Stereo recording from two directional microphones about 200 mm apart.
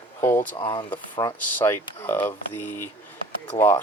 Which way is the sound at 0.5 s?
25° left (ahead or behind).